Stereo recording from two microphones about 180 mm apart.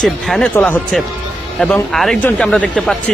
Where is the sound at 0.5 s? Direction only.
10° left (ahead or behind).